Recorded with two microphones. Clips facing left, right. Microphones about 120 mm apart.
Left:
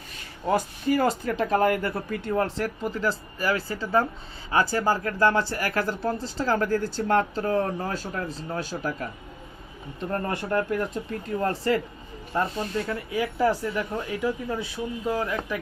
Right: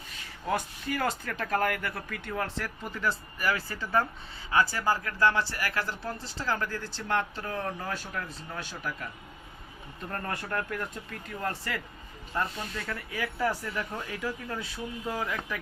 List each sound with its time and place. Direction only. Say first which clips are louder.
0.4 s speech: left 7 dB; 25° left (ahead or behind)
4.5 s speech: left 3 dB; 40° left (ahead or behind)
10.0 s speech: left 7 dB; 25° left (ahead or behind)